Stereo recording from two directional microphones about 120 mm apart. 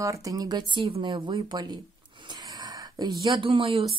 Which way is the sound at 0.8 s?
45° right (ahead or behind).